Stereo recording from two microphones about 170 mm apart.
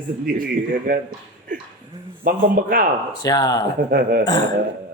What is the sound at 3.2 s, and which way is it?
Speech, 20° left (ahead or behind).